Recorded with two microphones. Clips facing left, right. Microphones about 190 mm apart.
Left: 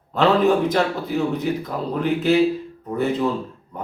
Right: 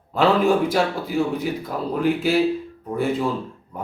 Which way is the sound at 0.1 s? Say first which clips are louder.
Left 1 dB; 10° right (ahead or behind).